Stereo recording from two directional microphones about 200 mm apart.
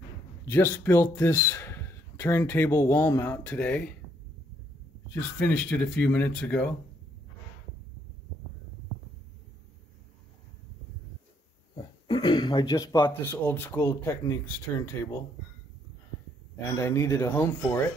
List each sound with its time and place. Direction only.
0.5 s speech: 10° left (ahead or behind)
5.1 s speech: 5° left (ahead or behind)
11.7 s speech: 20° left (ahead or behind)
16.5 s speech: 15° left (ahead or behind)